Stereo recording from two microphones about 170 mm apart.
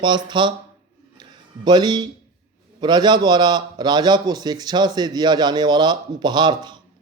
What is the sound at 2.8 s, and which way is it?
A man's voice, 25° right (ahead or behind).